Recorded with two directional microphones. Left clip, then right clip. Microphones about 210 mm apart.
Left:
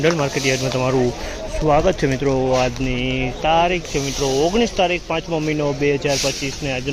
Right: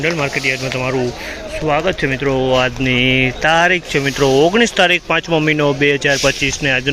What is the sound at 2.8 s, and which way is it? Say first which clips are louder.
Speech: right 9 dB; 50° right (ahead or behind).